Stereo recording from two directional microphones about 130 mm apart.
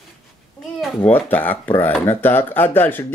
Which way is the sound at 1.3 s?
15° left (ahead or behind).